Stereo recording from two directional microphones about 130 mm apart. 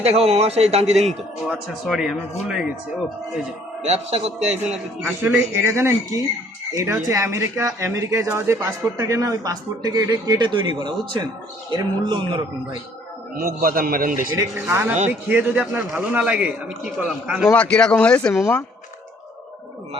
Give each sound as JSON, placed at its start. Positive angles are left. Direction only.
{"t": 0.0, "sound": "a man's voice", "side_deg": -50}
{"t": 1.9, "sound": "speech", "side_deg": -5}
{"t": 3.8, "sound": "a man's voice", "side_deg": -55}
{"t": 5.0, "sound": "a man's voice", "side_deg": -15}
{"t": 13.6, "sound": "a man's voice", "side_deg": -90}
{"t": 14.3, "sound": "a man's voice", "side_deg": -20}
{"t": 17.5, "sound": "speech", "side_deg": 10}